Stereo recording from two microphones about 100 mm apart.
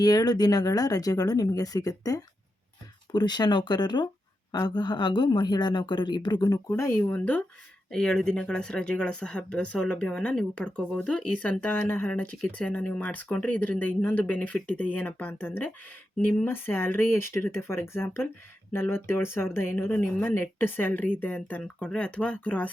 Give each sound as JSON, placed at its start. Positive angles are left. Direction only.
{"t": 0.0, "sound": "speech", "side_deg": 40}
{"t": 6.7, "sound": "speech", "side_deg": 25}
{"t": 7.9, "sound": "speech", "side_deg": 5}